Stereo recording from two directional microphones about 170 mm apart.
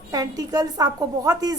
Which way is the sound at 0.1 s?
20° right (ahead or behind).